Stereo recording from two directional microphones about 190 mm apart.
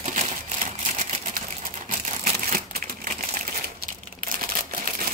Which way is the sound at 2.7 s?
50° right (ahead or behind).